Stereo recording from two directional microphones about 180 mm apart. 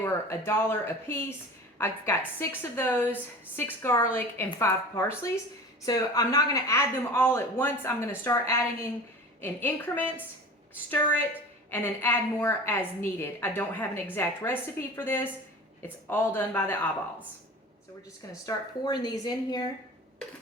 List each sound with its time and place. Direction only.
0.0 s speech: 15° left (ahead or behind)
11.7 s speech: 10° left (ahead or behind)
18.4 s speech: 20° left (ahead or behind)